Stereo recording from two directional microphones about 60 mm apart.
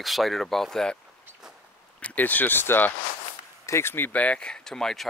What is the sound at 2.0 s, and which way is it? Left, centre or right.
Speech, left.